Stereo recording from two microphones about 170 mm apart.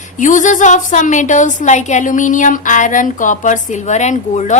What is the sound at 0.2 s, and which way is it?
A woman's voice, 50° left (ahead or behind).